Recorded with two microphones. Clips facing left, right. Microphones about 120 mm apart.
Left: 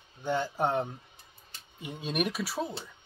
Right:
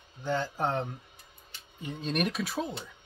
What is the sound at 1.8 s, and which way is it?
Speech, 10° left (ahead or behind).